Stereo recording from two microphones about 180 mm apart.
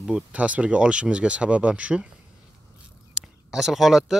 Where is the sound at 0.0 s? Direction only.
5° right (ahead or behind).